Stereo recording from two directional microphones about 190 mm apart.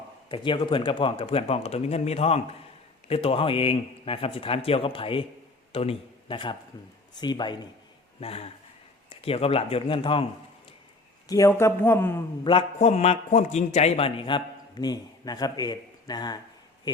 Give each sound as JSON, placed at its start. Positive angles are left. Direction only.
{"t": 0.3, "sound": "a man's voice", "side_deg": 25}
{"t": 11.3, "sound": "a man's voice", "side_deg": 15}
{"t": 12.5, "sound": "a man's voice", "side_deg": 30}